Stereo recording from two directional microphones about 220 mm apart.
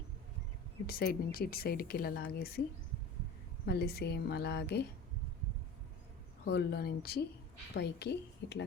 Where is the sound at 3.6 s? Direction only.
45° left (ahead or behind).